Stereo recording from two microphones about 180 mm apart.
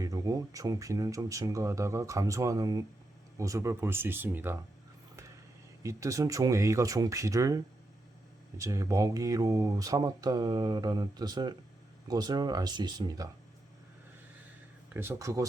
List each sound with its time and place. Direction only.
0.0 s speech: 20° right (ahead or behind)
5.8 s speech: 15° right (ahead or behind)
14.9 s speech: 15° right (ahead or behind)